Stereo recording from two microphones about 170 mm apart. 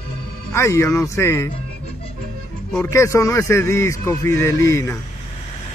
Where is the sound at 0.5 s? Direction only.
15° left (ahead or behind).